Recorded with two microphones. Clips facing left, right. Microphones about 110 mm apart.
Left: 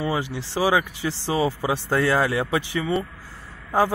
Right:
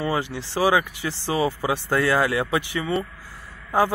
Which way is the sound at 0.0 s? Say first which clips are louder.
Even; 20° left (ahead or behind).